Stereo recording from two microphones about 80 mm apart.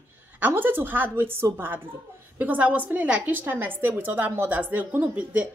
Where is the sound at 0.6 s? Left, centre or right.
Right.